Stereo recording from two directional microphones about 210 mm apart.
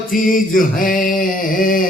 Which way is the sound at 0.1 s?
40° left (ahead or behind).